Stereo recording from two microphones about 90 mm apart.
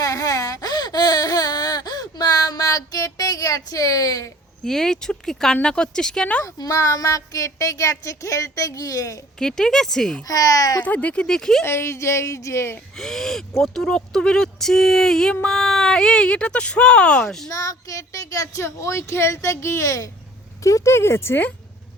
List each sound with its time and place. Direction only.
0.0 s a sound: 40° left (ahead or behind)
4.6 s speech: 5° left (ahead or behind)
6.4 s speech: 35° left (ahead or behind)
9.4 s speech: 5° left (ahead or behind)
10.2 s speech: 40° left (ahead or behind)
10.8 s speech: 15° left (ahead or behind)
11.6 s speech: 30° left (ahead or behind)
13.0 s speech: 5° left (ahead or behind)
17.5 s speech: 40° left (ahead or behind); by 21.5 s 25° left (ahead or behind)